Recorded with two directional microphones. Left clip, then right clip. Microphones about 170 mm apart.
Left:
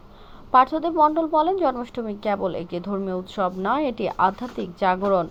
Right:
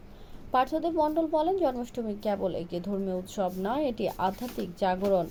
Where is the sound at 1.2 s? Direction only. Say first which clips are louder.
Left 6 dB; 15° right (ahead or behind).